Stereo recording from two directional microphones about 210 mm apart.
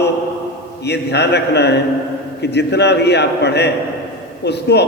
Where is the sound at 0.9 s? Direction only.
55° left (ahead or behind).